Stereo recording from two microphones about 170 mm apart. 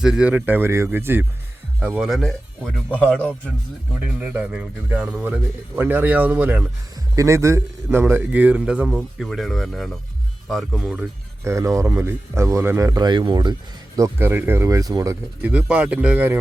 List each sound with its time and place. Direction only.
0.0 s speech: 5° right (ahead or behind)
4.2 s speech: 5° right (ahead or behind)
11.4 s speech: 15° right (ahead or behind)